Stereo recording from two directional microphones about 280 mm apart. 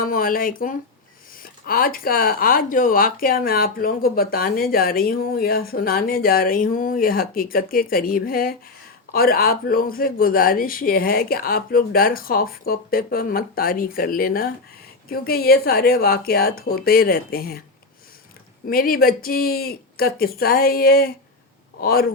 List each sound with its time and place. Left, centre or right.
0.0 s speech: left
18.7 s a man's voice: left